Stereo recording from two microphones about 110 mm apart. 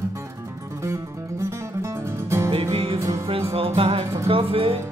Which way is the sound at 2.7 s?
55° right (ahead or behind).